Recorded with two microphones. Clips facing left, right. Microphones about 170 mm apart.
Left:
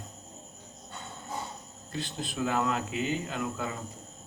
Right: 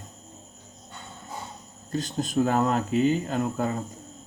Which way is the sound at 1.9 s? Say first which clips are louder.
Right 7 dB; 45° right (ahead or behind).